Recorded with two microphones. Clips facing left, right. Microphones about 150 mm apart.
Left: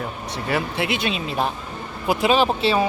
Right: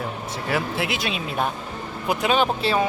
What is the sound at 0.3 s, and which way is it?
Speech, centre (ahead or behind).